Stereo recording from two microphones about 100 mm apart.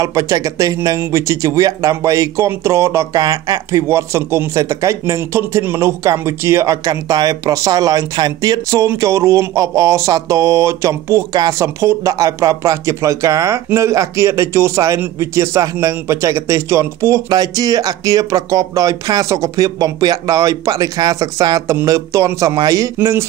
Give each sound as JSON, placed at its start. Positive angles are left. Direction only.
{"t": 0.0, "sound": "speech", "side_deg": -35}
{"t": 17.3, "sound": "speech", "side_deg": -40}